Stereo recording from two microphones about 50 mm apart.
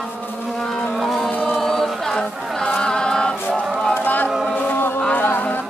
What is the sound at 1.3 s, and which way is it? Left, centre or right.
Chant, left.